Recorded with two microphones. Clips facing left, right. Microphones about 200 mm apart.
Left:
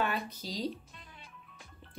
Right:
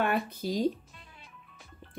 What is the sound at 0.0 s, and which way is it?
Speech, 55° right (ahead or behind).